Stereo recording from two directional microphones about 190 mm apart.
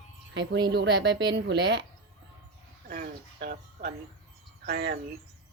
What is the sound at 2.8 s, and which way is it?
Speech, 50° right (ahead or behind).